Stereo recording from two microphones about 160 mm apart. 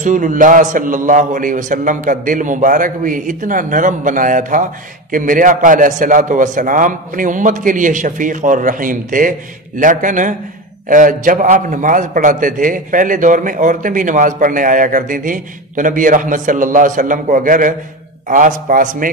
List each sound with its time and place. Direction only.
0.0 s a man's voice: 55° right (ahead or behind)